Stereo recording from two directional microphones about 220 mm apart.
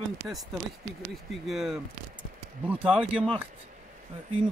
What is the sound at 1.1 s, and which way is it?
Speech, centre (ahead or behind).